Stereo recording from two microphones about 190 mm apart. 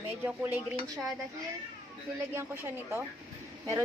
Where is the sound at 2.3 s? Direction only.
10° right (ahead or behind).